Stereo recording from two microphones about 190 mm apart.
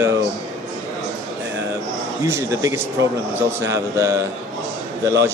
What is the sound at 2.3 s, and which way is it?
Speech, 15° right (ahead or behind).